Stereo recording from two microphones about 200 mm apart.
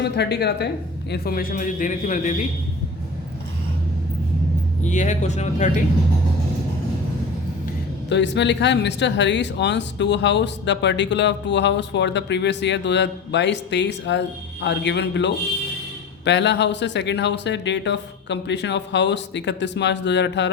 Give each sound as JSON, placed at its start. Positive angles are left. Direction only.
{"t": 0.0, "sound": "a man's voice", "side_deg": 55}
{"t": 4.8, "sound": "speech", "side_deg": 35}
{"t": 8.1, "sound": "speech", "side_deg": 60}